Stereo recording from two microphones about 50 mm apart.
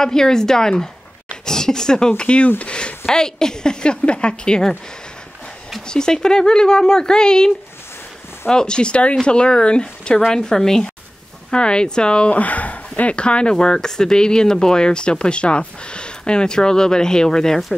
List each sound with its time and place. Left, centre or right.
0.0 s speech: centre
2.6 s a sound: left
3.1 s speech: centre
5.9 s speech: centre